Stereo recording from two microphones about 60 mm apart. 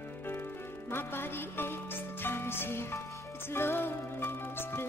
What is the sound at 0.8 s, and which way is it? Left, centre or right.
Music, left.